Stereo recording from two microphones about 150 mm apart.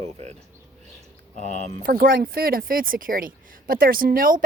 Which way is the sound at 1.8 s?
80° right.